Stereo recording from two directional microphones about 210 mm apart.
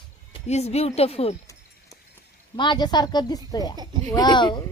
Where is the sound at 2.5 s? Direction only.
20° left (ahead or behind).